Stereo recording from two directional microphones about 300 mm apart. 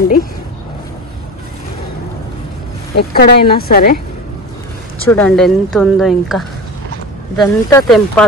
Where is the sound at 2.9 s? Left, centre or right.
Left.